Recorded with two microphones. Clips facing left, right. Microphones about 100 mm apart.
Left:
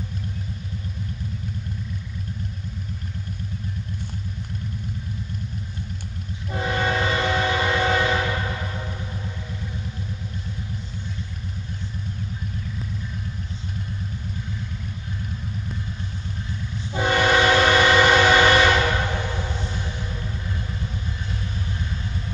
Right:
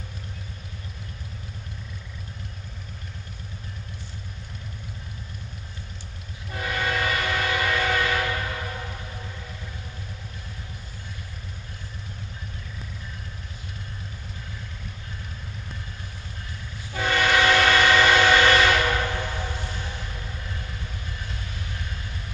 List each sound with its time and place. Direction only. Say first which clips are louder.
6.5 s train: left 4 dB; 25° left (ahead or behind)
16.9 s train: left 3 dB; 20° left (ahead or behind)